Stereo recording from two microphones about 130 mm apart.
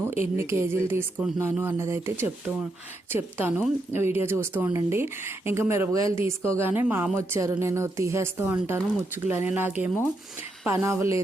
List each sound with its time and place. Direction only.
0.3 s a woman's voice: 20° right (ahead or behind)